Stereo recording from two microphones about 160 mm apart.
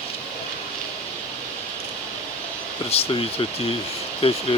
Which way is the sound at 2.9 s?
35° left (ahead or behind).